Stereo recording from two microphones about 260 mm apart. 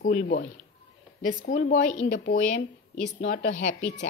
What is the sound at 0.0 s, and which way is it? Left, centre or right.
Speech, left.